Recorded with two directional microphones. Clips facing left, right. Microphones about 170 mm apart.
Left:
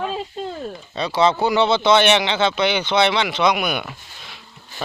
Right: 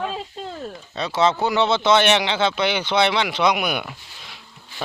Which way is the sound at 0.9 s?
Centre (ahead or behind).